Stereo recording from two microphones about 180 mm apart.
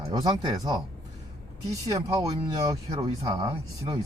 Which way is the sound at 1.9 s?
15° right (ahead or behind).